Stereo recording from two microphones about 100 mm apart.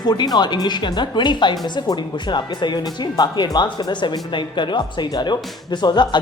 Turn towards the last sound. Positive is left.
turn(degrees=50)  # may be behind; listen again after turning